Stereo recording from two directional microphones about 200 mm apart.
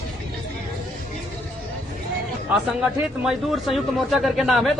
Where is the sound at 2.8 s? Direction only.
5° right (ahead or behind).